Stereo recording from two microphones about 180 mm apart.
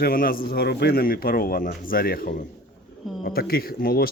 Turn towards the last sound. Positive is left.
turn(degrees=55)  # may be behind; listen again after turning